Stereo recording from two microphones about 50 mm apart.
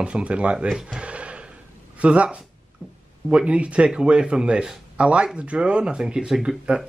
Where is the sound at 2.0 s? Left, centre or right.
Right.